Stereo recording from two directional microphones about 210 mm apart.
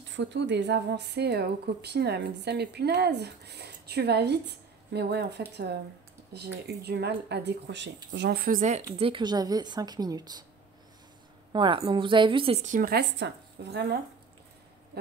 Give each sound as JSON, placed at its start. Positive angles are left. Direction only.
{"t": 0.1, "sound": "speech", "side_deg": -55}
{"t": 8.9, "sound": "a woman's voice", "side_deg": -25}
{"t": 11.5, "sound": "a woman's voice", "side_deg": -20}
{"t": 12.6, "sound": "speech", "side_deg": -40}